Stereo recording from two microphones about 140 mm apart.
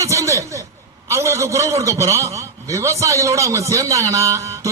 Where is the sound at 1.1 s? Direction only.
20° right (ahead or behind).